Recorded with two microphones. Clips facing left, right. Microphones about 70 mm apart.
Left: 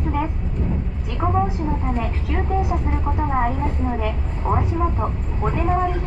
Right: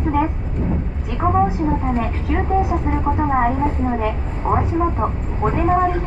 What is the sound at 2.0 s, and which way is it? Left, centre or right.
A woman's voice, right.